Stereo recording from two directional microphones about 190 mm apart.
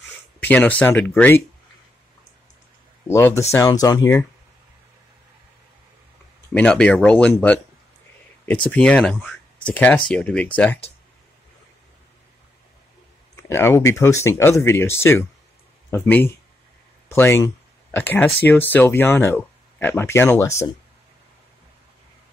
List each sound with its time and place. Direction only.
0.4 s speech: 10° left (ahead or behind)
3.1 s speech: 15° left (ahead or behind)
6.5 s speech: 5° left (ahead or behind)
8.6 s speech: 5° left (ahead or behind)
13.5 s speech: 15° left (ahead or behind)